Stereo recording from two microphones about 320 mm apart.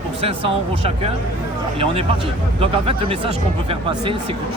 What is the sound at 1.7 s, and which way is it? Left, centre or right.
Speech, centre.